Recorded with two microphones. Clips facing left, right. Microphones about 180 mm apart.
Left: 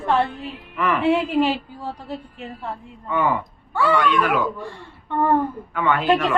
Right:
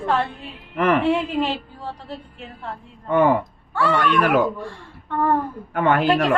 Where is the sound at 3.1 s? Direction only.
45° right (ahead or behind).